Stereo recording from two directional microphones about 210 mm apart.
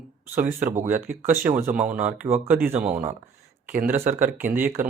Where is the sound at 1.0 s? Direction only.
10° right (ahead or behind).